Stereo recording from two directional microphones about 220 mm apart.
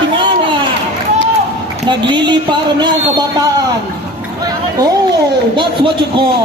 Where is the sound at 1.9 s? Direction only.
20° right (ahead or behind).